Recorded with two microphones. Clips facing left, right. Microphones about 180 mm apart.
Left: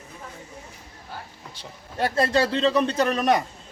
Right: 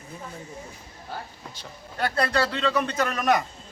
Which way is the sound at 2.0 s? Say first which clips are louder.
Left 3 dB; 25° left (ahead or behind).